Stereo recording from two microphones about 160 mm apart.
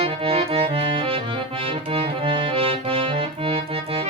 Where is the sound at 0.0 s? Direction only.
35° right (ahead or behind).